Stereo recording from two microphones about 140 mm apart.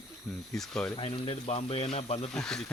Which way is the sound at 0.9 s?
40° left (ahead or behind).